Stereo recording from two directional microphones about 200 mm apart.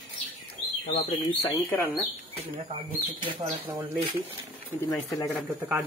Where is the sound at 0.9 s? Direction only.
15° left (ahead or behind).